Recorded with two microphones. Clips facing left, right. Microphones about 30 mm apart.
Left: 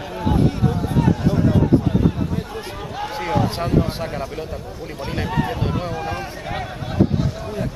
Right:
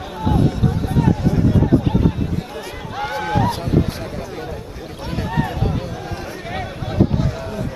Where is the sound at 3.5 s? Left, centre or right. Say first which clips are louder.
Right 1 dB; left.